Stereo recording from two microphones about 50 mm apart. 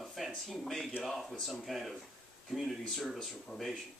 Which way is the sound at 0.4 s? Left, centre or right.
Centre.